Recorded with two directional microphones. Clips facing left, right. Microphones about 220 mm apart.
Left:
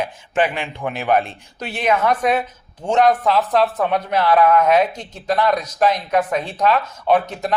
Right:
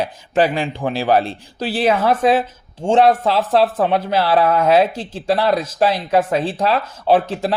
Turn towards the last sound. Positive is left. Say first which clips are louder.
# right 2 dB
turn(degrees=-30)  # may be behind; listen again after turning